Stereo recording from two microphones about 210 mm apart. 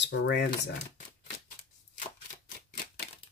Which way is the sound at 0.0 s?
55° left (ahead or behind).